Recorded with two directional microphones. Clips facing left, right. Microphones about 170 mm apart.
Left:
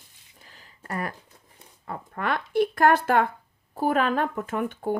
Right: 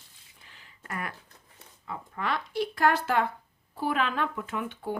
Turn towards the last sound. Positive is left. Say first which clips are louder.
# left 6 dB
turn(degrees=50)  # may be behind; listen again after turning